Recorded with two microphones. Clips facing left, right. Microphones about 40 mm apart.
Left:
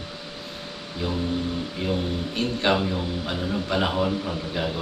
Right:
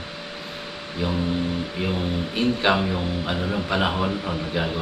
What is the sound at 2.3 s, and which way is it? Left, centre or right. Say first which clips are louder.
A man's voice: right 2 dB; centre.